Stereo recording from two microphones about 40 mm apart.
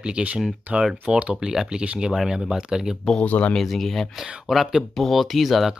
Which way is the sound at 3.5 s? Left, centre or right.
Centre.